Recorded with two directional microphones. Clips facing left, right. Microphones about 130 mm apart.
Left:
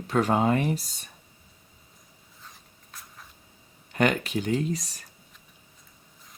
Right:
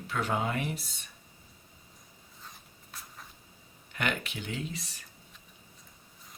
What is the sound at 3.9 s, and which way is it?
Speech, 40° left (ahead or behind).